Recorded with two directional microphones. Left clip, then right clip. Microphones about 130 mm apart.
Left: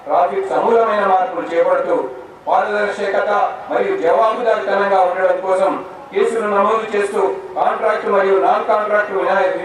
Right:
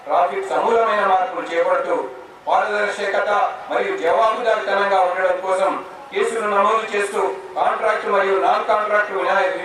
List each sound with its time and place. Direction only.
0.1 s a man's voice: 15° left (ahead or behind)
1.7 s a man's voice: 30° left (ahead or behind)
2.5 s a man's voice: 10° left (ahead or behind)